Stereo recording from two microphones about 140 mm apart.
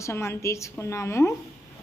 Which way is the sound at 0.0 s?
20° left (ahead or behind).